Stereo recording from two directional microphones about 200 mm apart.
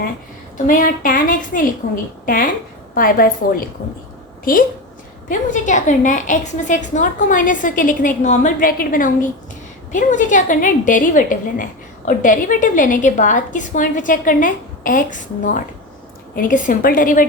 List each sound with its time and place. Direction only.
0.5 s a woman's voice: 45° left (ahead or behind)
5.3 s a woman's voice: 40° left (ahead or behind)